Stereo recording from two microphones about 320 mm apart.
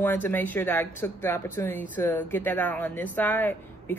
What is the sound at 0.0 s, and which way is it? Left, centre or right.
Speech, centre.